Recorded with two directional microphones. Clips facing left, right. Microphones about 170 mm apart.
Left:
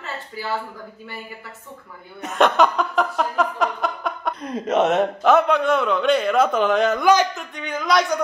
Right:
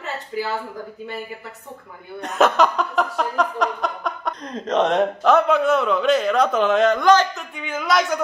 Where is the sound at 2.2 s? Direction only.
Centre (ahead or behind).